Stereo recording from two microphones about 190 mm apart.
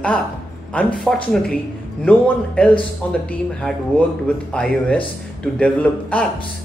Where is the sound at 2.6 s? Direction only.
5° left (ahead or behind).